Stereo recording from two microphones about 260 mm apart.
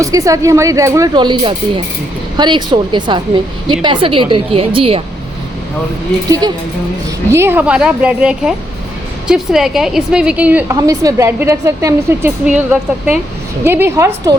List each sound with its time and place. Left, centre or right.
0.0 s a woman's voice: centre
7.3 s a woman's voice: centre